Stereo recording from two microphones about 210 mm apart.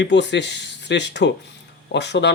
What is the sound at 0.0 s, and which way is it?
Speech, 55° left (ahead or behind).